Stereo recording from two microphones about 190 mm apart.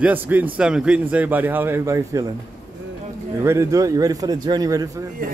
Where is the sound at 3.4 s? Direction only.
15° right (ahead or behind).